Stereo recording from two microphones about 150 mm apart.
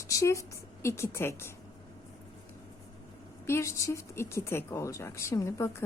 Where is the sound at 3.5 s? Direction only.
20° left (ahead or behind).